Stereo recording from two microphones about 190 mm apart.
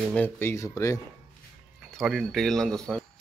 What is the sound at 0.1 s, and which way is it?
Speech, 10° left (ahead or behind).